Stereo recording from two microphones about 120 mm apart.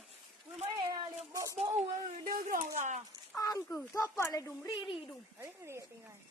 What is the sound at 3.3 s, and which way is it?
Speech, 30° left (ahead or behind).